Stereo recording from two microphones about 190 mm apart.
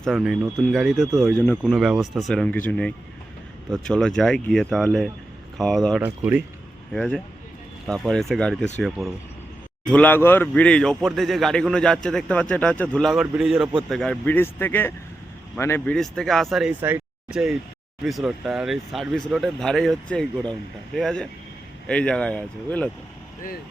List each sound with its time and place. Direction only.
0.0 s a man's voice: centre (ahead or behind)